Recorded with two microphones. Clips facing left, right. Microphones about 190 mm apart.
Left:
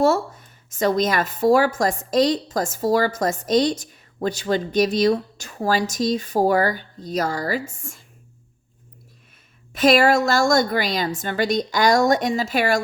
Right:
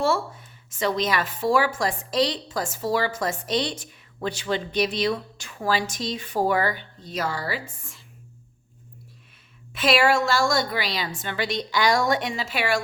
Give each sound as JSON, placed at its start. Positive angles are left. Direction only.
{"t": 0.0, "sound": "speech", "side_deg": 40}
{"t": 9.7, "sound": "speech", "side_deg": 40}